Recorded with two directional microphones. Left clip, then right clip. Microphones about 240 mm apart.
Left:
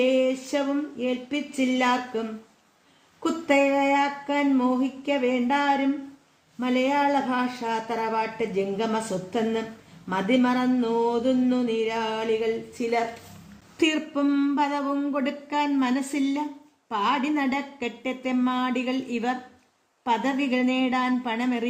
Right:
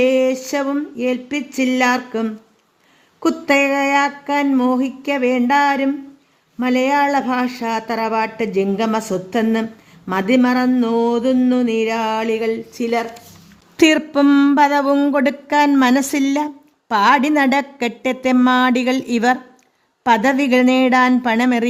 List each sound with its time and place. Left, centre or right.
0.0 s speech: right
3.2 s speech: right